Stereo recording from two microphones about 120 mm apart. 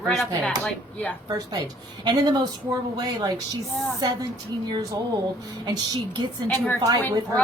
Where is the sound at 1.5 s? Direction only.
35° right (ahead or behind).